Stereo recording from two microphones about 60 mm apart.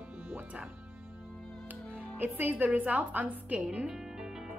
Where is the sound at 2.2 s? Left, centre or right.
Right.